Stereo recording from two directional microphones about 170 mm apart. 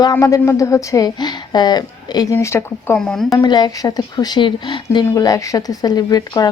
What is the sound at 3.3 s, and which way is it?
Speech, 25° left (ahead or behind).